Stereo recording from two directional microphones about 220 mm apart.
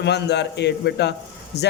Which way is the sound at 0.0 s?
50° left (ahead or behind).